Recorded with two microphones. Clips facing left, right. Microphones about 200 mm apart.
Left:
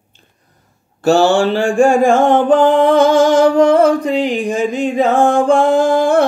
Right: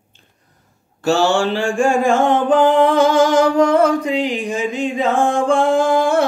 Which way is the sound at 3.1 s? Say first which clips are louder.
Left 3 dB; 30° left (ahead or behind).